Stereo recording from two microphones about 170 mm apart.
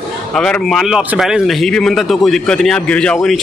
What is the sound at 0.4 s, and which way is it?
A man's voice, 5° left (ahead or behind).